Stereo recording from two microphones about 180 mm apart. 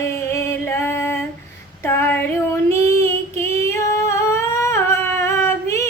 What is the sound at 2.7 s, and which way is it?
Singing, 15° left (ahead or behind).